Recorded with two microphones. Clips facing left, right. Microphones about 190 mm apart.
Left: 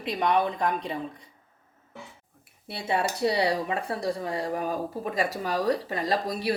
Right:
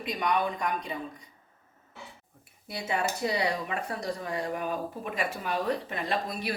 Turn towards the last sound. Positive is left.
turn(degrees=35)  # may be behind; listen again after turning